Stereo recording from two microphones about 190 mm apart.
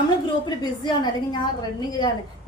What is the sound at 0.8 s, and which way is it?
Speech, 25° left (ahead or behind).